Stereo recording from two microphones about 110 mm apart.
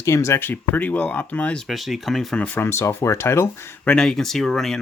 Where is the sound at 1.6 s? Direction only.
Centre (ahead or behind); by 3.7 s 25° left (ahead or behind).